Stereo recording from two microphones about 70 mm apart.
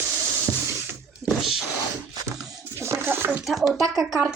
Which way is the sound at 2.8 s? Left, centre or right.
Right.